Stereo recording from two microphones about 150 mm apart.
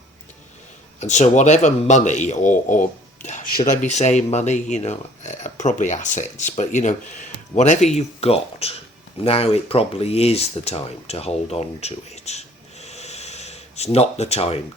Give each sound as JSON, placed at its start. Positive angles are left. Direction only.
{"t": 0.9, "sound": "speech", "side_deg": 50}